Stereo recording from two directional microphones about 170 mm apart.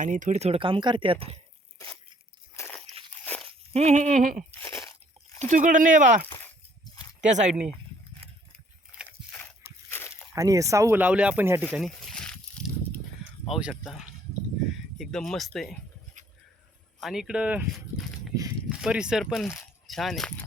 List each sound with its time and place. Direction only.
0.0 s speech: 50° right (ahead or behind); by 1.4 s 35° right (ahead or behind)
2.6 s crunch: 10° left (ahead or behind)
3.2 s walk: 5° left (ahead or behind)
3.7 s speech: 40° right (ahead or behind)
4.6 s crunch: 15° left (ahead or behind)
5.4 s speech: 50° right (ahead or behind)
6.8 s a sound: 25° left (ahead or behind)
7.3 s speech: 45° right (ahead or behind)
9.0 s a sound: 10° left (ahead or behind)
10.3 s speech: 20° right (ahead or behind)
11.7 s a sound: centre (ahead or behind)
13.5 s speech: 5° right (ahead or behind)
17.0 s speech: centre (ahead or behind)